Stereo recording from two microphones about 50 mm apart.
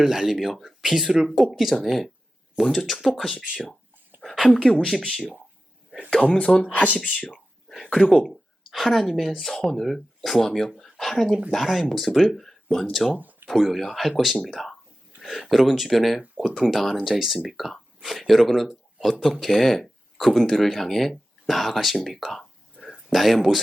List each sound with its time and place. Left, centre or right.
0.0 s speech: centre
4.2 s a sound: centre
4.9 s speech: centre
6.1 s speech: centre
7.7 s speech: centre
13.1 s a sound: right
13.5 s speech: centre